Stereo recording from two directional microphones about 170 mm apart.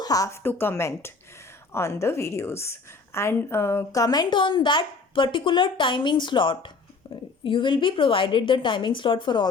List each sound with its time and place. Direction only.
0.0 s a woman's voice: 20° left (ahead or behind)